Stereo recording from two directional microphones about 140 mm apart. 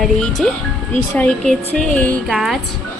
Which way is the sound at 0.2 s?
5° left (ahead or behind).